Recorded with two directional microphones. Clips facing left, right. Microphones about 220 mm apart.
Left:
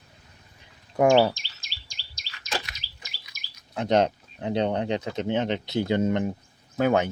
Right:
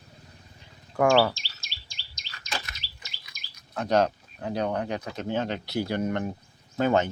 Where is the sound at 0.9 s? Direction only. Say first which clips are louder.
Left 2 dB; 20° left (ahead or behind).